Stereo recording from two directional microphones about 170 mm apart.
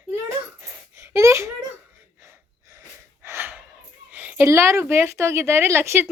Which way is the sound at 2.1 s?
15° right (ahead or behind).